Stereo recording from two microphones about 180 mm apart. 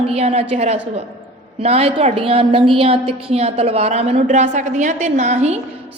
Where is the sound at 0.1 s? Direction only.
35° right (ahead or behind).